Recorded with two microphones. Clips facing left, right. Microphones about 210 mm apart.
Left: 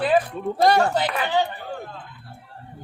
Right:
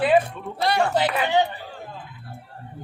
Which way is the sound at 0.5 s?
45° left (ahead or behind).